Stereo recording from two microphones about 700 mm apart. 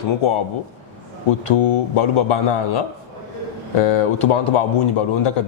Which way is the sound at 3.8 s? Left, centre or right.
Left.